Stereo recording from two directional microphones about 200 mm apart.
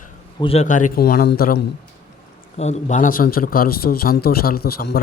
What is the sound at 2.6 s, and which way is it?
Speech, 35° left (ahead or behind).